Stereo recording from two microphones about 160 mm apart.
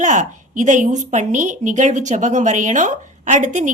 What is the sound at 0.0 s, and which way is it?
A woman's voice, 50° right (ahead or behind).